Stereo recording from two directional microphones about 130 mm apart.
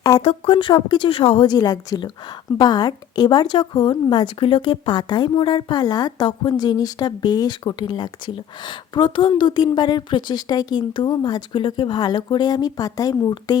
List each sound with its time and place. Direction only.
0.2 s a woman's voice: 45° left (ahead or behind)
1.5 s a woman's voice: 30° left (ahead or behind)